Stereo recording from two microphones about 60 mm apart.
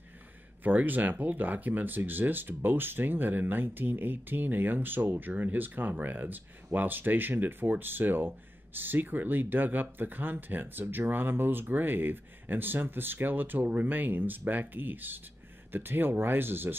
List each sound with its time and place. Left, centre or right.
0.7 s speech: right